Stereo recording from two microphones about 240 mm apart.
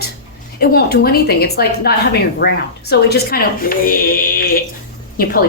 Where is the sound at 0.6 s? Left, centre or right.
Left.